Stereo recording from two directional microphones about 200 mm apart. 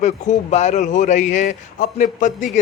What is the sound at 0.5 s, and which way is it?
Speech, 35° left (ahead or behind).